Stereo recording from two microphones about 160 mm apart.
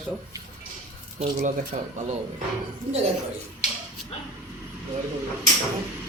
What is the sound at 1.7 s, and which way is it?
Speech, 45° right (ahead or behind).